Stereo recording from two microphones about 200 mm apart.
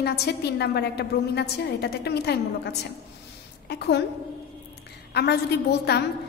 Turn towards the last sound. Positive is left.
turn(degrees=55)  # may be behind; listen again after turning